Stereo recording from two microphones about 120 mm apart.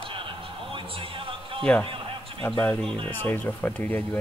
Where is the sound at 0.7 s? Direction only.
45° right (ahead or behind).